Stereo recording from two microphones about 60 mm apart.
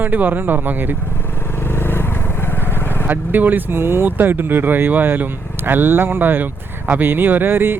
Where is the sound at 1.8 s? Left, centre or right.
Left.